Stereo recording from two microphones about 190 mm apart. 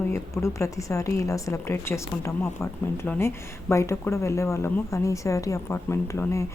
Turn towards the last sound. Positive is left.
turn(degrees=15)  # may be behind; listen again after turning